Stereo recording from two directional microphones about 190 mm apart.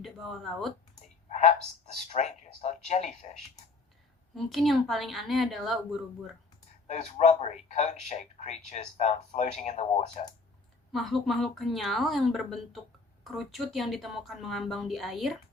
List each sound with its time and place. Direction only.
0.0 s speech: centre (ahead or behind)
1.3 s a sound: 35° left (ahead or behind)
2.0 s speech: 35° left (ahead or behind)
4.4 s speech: centre (ahead or behind)
6.8 s speech: 35° left (ahead or behind)
10.9 s speech: centre (ahead or behind)